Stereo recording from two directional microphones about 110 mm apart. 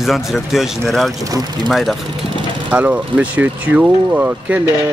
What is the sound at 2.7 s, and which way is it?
Speech, 10° right (ahead or behind).